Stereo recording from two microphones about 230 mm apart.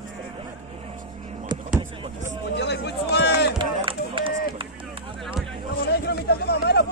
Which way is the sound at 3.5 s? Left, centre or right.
Right.